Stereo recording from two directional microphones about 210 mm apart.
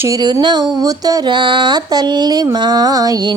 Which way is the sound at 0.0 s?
15° right (ahead or behind).